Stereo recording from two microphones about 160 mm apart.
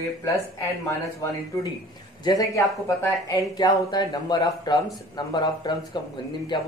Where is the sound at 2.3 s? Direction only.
20° left (ahead or behind).